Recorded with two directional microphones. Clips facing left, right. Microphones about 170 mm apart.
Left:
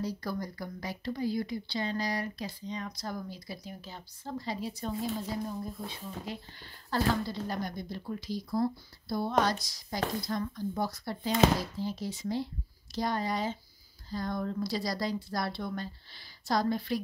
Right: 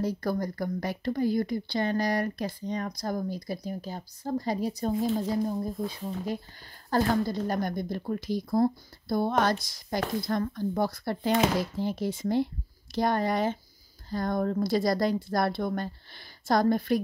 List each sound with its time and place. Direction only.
0.0 s speech: 50° right (ahead or behind)